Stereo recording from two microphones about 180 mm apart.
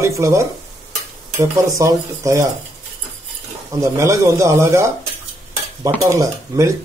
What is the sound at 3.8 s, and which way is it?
Speech, 15° right (ahead or behind).